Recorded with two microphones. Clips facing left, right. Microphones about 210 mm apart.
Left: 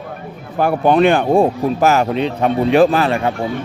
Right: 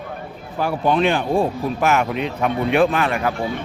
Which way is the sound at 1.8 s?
35° left (ahead or behind).